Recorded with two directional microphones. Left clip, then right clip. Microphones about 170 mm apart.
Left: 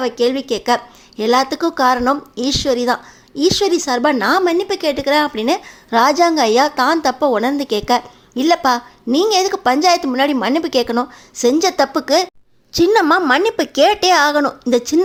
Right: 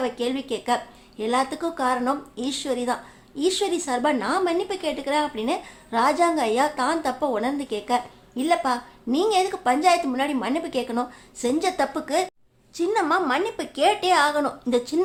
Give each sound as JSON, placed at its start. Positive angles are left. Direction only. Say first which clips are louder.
{"t": 0.0, "sound": "a woman's voice", "louder": "left 9 dB", "side_deg": 30}